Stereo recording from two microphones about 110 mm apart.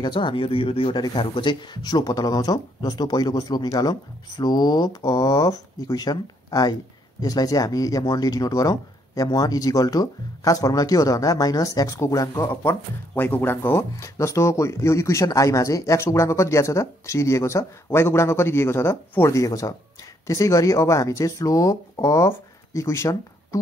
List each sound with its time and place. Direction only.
0.0 s speech: 45° left (ahead or behind)
0.9 s speech: 45° left (ahead or behind)